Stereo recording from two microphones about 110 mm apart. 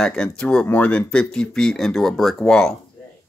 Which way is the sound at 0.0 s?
5° left (ahead or behind).